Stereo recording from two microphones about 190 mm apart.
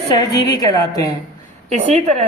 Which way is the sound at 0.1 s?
20° left (ahead or behind).